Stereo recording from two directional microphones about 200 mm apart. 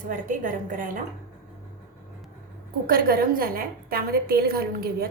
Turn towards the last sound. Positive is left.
turn(degrees=-50)  # may be behind; listen again after turning